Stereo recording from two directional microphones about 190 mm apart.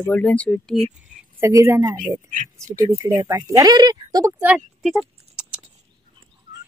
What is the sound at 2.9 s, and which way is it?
Speech, 15° right (ahead or behind).